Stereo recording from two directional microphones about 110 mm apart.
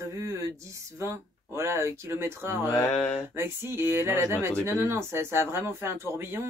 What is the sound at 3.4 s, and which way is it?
Speech, 20° right (ahead or behind).